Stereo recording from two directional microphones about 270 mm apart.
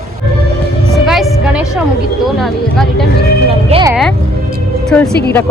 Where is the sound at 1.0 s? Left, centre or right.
Centre.